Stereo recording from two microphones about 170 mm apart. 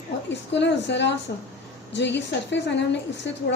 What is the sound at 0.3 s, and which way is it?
A woman's voice, 90° left.